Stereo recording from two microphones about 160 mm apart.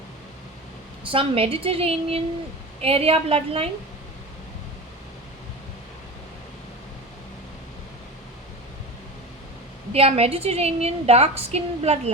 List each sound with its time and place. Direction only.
1.0 s a woman's voice: 35° right (ahead or behind)
9.9 s a woman's voice: 40° right (ahead or behind)